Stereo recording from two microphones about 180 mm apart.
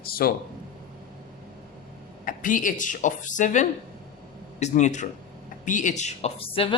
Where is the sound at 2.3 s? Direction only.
45° left (ahead or behind); by 6.7 s 30° left (ahead or behind).